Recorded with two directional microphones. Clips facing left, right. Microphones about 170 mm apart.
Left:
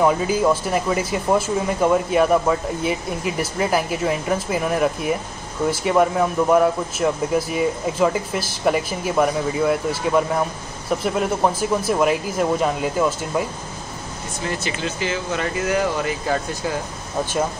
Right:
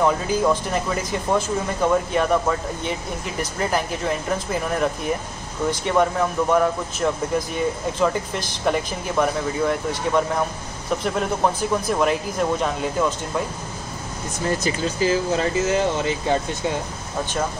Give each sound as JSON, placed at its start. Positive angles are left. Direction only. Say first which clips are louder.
{"t": 0.0, "sound": "speech", "louder": "left 2 dB", "side_deg": 5}
{"t": 14.6, "sound": "speech", "louder": "right 3 dB", "side_deg": -40}